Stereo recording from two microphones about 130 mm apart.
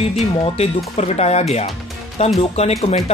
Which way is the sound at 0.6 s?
55° left (ahead or behind).